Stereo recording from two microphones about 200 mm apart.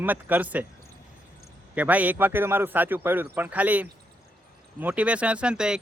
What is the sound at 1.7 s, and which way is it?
Speech, 10° right (ahead or behind).